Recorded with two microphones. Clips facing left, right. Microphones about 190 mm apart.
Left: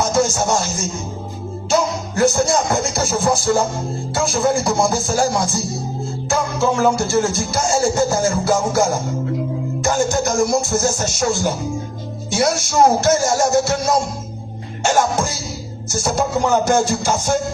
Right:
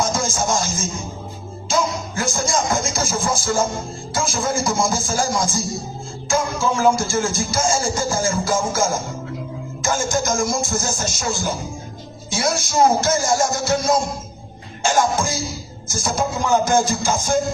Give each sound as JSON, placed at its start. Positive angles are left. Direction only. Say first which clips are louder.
{"t": 0.1, "sound": "music", "louder": "left 5 dB", "side_deg": 65}
{"t": 2.1, "sound": "music", "louder": "left 8 dB", "side_deg": 65}
{"t": 9.8, "sound": "music", "louder": "left 3 dB", "side_deg": 65}